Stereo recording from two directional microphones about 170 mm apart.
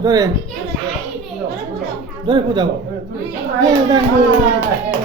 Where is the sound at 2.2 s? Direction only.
25° right (ahead or behind).